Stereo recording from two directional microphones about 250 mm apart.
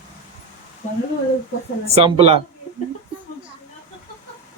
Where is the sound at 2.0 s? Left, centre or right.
Right.